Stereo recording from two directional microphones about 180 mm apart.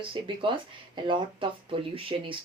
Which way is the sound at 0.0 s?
30° right (ahead or behind).